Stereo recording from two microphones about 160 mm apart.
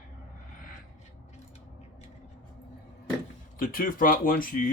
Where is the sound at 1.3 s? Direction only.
45° left (ahead or behind).